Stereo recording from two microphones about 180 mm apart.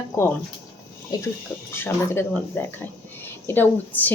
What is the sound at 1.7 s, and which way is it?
Speech, 15° left (ahead or behind).